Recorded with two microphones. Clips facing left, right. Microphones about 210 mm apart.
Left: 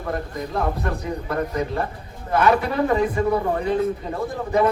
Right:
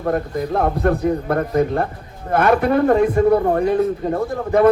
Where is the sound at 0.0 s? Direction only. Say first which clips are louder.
Right 7 dB; 55° right (ahead or behind).